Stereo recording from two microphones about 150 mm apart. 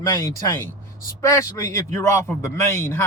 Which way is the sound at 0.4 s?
20° left (ahead or behind).